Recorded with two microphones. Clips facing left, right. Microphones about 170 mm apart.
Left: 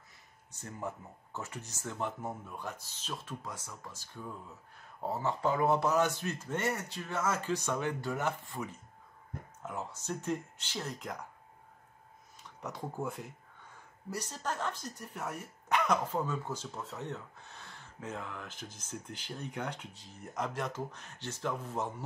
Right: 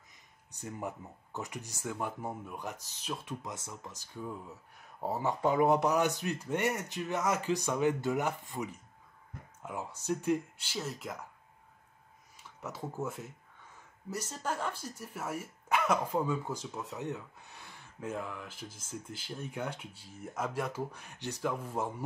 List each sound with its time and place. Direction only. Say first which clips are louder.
0.5 s speech: right 1 dB; 15° right (ahead or behind)
9.7 s speech: right 4 dB; 15° right (ahead or behind)
12.4 s speech: even; 5° right (ahead or behind)